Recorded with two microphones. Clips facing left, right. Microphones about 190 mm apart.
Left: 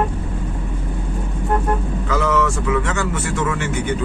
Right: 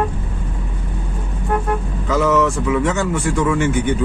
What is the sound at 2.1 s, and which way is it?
Speech, 15° right (ahead or behind).